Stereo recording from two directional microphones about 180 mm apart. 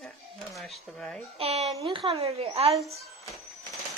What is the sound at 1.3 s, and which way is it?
Speech, 35° right (ahead or behind).